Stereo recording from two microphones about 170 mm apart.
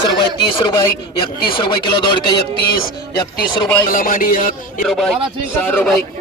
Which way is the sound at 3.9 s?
55° left (ahead or behind).